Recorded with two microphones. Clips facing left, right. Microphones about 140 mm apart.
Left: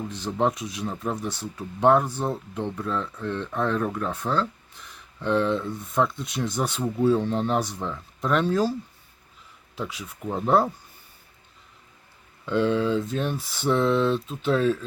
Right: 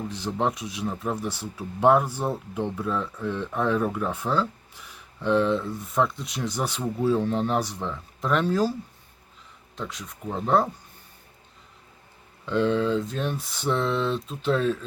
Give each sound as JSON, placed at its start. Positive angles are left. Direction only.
{"t": 0.0, "sound": "speech", "side_deg": 0}
{"t": 9.7, "sound": "speech", "side_deg": 5}
{"t": 12.5, "sound": "speech", "side_deg": 5}